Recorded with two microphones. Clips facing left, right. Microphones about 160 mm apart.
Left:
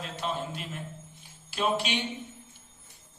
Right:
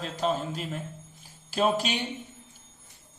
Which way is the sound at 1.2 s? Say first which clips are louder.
Right 5 dB; 40° right (ahead or behind).